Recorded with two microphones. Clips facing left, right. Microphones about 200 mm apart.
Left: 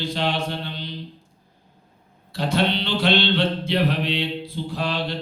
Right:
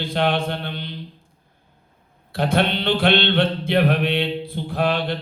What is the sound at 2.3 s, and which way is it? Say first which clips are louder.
Mantra: right 2 dB; 55° right (ahead or behind).